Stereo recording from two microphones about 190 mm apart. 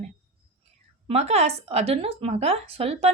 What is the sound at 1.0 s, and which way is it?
Speech, 35° right (ahead or behind).